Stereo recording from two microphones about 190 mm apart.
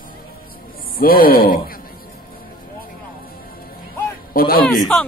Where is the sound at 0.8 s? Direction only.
50° left (ahead or behind).